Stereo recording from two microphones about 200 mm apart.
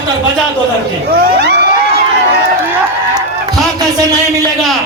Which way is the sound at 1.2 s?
50° right (ahead or behind).